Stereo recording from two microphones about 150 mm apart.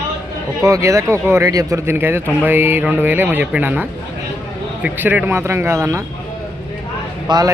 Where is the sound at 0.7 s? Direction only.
20° right (ahead or behind).